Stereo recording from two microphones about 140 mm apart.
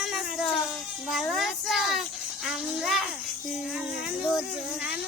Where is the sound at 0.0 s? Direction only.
Centre (ahead or behind).